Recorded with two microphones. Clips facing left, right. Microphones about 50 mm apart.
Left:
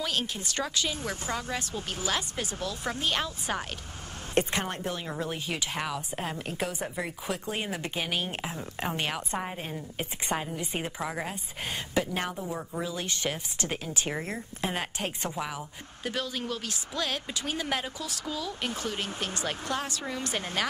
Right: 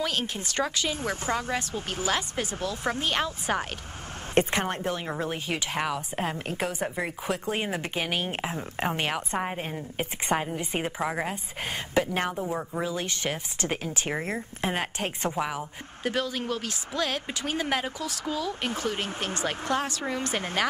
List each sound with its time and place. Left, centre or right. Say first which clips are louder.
0.0 s speech: right 2 dB; right